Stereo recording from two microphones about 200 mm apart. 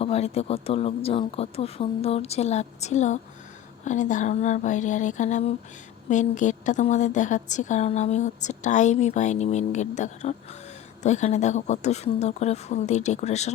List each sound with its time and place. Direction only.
0.0 s a woman's voice: 30° left (ahead or behind)